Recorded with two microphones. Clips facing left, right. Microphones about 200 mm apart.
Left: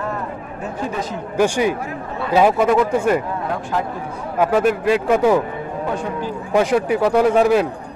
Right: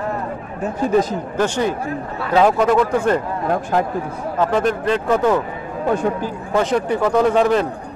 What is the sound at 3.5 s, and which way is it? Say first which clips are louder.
Speech: right 6 dB; 45° right (ahead or behind).